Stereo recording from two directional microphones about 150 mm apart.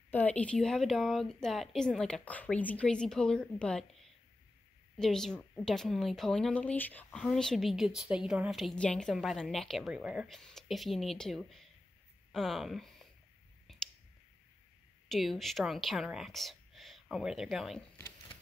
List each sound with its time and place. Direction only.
0.1 s a woman's voice: 10° left (ahead or behind)
4.9 s a woman's voice: 5° left (ahead or behind)
13.7 s a sound: centre (ahead or behind)
15.0 s speech: centre (ahead or behind)